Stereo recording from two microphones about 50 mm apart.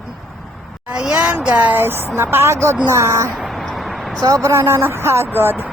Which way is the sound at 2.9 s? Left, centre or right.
Right.